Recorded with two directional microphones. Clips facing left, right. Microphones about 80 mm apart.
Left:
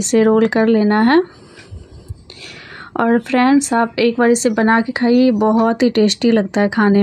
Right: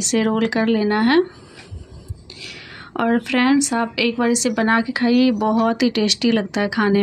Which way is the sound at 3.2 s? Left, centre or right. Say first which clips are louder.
Left 4 dB; left.